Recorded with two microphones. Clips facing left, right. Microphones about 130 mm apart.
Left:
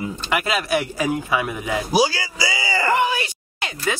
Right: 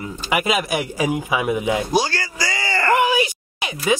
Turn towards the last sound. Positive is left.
turn(degrees=-15)  # may be behind; listen again after turning